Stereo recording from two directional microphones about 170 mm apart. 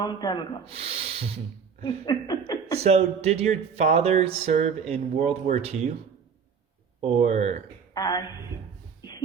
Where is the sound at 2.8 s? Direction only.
40° right (ahead or behind).